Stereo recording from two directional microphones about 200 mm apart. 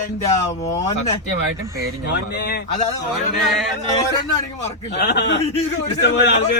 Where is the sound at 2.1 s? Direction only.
55° left (ahead or behind).